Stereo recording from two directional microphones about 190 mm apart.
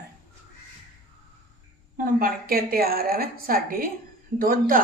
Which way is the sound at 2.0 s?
50° right (ahead or behind).